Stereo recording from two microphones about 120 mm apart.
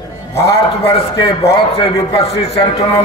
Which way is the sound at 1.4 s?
60° left (ahead or behind).